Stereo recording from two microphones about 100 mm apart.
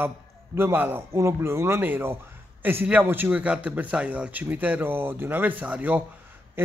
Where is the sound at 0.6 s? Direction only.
20° right (ahead or behind).